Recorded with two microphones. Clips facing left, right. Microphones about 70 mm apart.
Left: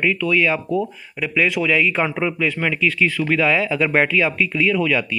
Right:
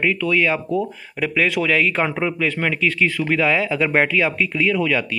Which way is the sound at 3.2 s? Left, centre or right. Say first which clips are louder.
Left 1 dB; right.